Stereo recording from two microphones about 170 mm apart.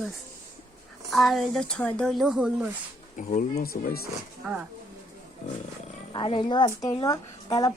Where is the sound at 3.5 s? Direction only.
60° left (ahead or behind).